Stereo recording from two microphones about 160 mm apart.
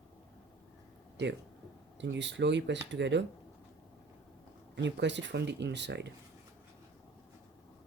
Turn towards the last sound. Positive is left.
turn(degrees=-90)